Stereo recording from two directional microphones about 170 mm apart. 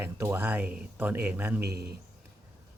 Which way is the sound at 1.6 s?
70° right (ahead or behind).